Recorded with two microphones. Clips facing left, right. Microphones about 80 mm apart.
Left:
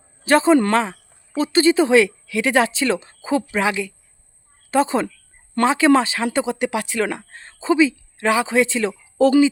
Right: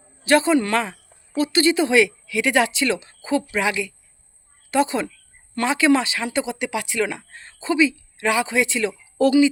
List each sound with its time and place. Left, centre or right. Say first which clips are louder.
0.3 s speech: left 3 dB; left